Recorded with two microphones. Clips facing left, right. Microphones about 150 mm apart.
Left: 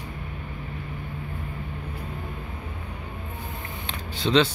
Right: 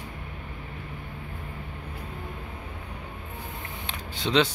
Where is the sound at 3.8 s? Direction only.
15° right (ahead or behind).